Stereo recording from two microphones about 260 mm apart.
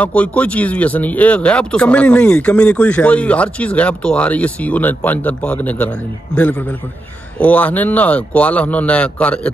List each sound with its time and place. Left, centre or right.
0.0 s speech: centre
7.3 s speech: centre